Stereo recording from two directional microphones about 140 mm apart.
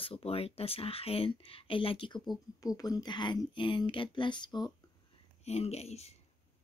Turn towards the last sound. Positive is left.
turn(degrees=50)  # may be behind; listen again after turning